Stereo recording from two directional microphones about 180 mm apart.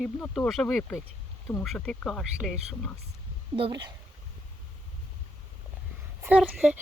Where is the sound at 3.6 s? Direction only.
25° right (ahead or behind).